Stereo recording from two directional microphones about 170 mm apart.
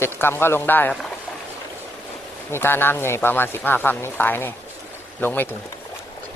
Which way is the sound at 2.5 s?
15° left (ahead or behind).